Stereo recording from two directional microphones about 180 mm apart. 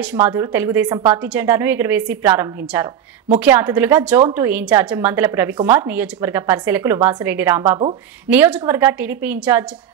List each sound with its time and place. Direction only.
0.0 s a woman's voice: 10° right (ahead or behind)
0.8 s a woman's voice: 20° right (ahead or behind)
1.1 s a woman's voice: 10° right (ahead or behind)